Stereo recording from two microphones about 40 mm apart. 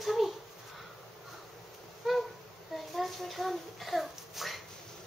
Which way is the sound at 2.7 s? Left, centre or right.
Centre.